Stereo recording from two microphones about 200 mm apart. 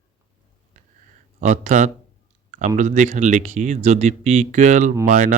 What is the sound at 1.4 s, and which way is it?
Speech, 35° right (ahead or behind).